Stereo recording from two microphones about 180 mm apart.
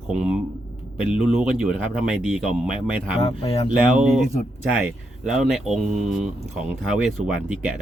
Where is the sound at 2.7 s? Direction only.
30° left (ahead or behind).